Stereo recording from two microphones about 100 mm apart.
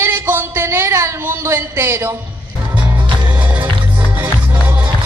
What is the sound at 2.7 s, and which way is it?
Music, 15° right (ahead or behind).